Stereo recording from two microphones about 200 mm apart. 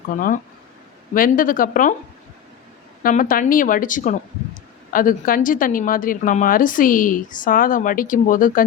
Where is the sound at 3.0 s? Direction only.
45° left (ahead or behind).